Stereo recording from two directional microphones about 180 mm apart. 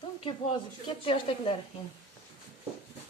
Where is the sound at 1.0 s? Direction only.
30° left (ahead or behind).